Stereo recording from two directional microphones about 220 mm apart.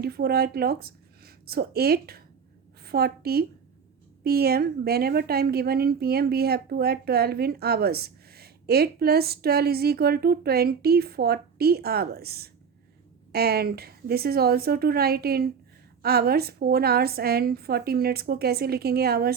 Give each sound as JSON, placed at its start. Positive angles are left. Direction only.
{"t": 0.0, "sound": "a woman's voice", "side_deg": -45}